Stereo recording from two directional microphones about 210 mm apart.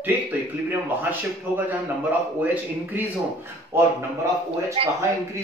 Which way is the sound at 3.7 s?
10° right (ahead or behind).